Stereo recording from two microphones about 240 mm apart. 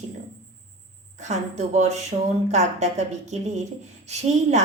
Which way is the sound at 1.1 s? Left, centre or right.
Right.